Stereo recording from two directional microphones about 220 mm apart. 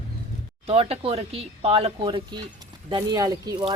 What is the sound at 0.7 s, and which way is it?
Speech, 25° right (ahead or behind).